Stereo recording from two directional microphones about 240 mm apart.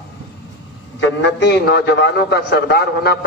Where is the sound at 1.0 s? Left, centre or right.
Left.